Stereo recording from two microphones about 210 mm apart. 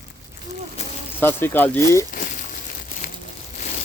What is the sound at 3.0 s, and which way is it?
Crumpling, 45° left (ahead or behind).